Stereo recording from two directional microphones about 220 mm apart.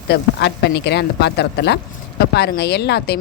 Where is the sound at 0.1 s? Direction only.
50° left (ahead or behind).